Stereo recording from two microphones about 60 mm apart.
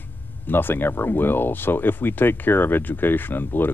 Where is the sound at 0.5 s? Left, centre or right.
Left.